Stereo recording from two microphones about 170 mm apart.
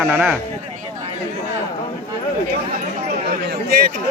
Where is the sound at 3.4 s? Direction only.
60° right (ahead or behind).